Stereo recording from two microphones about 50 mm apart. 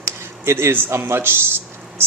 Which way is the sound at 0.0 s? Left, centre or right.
Right.